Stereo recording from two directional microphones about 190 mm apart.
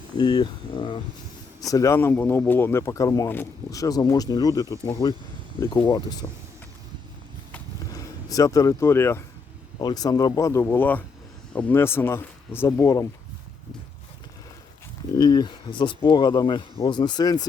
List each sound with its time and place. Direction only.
0.2 s speech: 25° left (ahead or behind)
7.9 s speech: 20° left (ahead or behind)
15.2 s speech: 25° left (ahead or behind)